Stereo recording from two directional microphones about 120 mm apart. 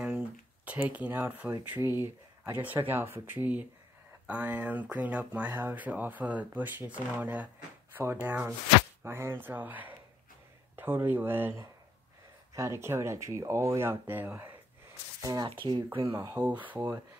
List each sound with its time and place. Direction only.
0.7 s speech: 10° right (ahead or behind)
15.2 s speech: 30° right (ahead or behind)
15.5 s speech: 40° right (ahead or behind)
16.3 s speech: 15° right (ahead or behind)